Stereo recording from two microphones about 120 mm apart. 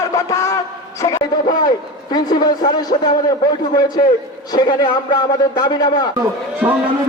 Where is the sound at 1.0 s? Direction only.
30° left (ahead or behind).